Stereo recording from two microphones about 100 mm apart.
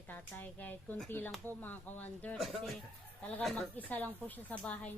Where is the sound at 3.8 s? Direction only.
15° left (ahead or behind).